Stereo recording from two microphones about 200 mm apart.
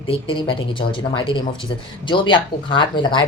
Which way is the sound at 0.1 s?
25° left (ahead or behind).